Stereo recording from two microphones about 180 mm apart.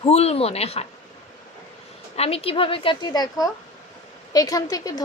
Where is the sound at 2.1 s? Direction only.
35° left (ahead or behind).